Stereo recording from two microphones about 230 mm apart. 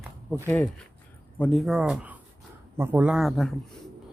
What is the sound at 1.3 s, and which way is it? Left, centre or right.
A man's voice, centre.